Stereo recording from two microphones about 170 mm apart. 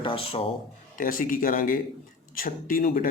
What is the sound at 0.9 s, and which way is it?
Speech, 55° left (ahead or behind).